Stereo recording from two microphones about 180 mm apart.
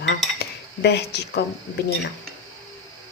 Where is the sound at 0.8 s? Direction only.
65° left (ahead or behind).